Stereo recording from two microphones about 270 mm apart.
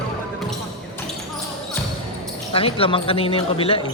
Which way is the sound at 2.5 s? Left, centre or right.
Centre.